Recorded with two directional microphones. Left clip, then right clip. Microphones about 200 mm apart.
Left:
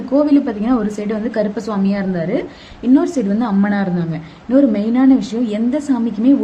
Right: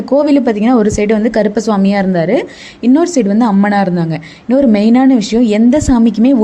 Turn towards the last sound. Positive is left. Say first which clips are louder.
# right 6 dB
turn(degrees=-45)  # may be behind; listen again after turning